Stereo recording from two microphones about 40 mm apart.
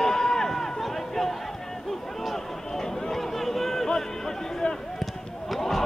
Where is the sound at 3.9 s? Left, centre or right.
Centre.